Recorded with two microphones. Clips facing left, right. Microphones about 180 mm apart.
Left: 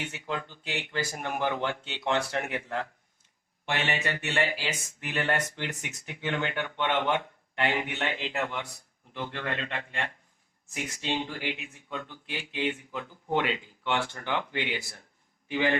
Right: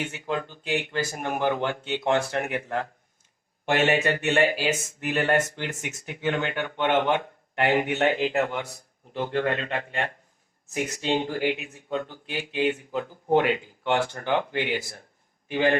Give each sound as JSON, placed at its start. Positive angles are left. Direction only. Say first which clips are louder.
{"t": 0.0, "sound": "speech", "louder": "right 5 dB", "side_deg": -50}